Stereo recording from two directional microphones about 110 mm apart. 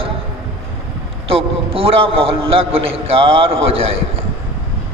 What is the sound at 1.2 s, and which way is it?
A man's voice, 60° right (ahead or behind).